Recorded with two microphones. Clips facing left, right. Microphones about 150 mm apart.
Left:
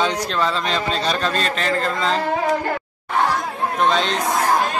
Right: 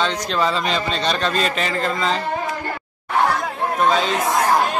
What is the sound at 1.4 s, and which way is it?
Speech, 5° right (ahead or behind).